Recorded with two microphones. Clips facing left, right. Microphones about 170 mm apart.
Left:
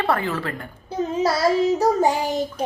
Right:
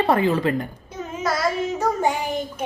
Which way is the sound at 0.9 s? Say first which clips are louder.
Left 8 dB; 30° left (ahead or behind).